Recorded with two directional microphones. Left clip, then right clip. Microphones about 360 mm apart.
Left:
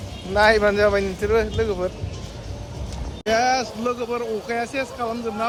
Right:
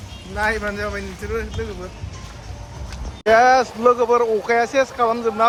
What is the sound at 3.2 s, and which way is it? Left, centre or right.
Speech, centre.